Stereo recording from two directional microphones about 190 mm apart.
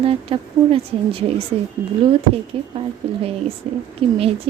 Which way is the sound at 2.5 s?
30° right (ahead or behind).